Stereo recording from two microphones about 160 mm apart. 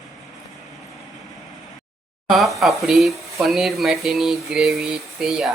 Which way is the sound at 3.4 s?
Centre (ahead or behind).